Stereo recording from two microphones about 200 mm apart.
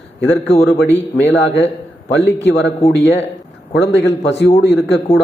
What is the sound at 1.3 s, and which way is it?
A man's voice, 65° left (ahead or behind).